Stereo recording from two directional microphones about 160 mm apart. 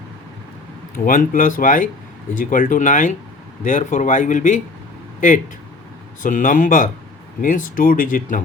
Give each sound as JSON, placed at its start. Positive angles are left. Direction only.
{"t": 0.9, "sound": "speech", "side_deg": 60}
{"t": 6.2, "sound": "speech", "side_deg": 55}